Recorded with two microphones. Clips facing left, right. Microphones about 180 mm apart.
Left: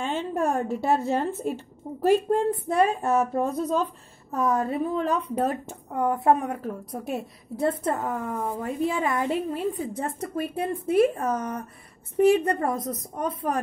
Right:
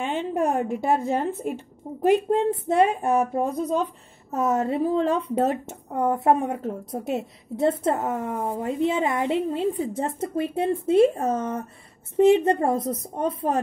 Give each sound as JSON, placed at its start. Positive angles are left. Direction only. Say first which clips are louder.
{"t": 0.0, "sound": "a woman's voice", "louder": "right 2 dB", "side_deg": -15}